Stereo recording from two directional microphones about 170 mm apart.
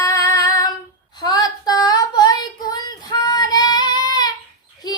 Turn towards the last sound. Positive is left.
turn(degrees=25)  # may be behind; listen again after turning